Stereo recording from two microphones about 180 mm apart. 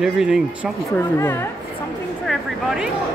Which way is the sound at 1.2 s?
15° left (ahead or behind).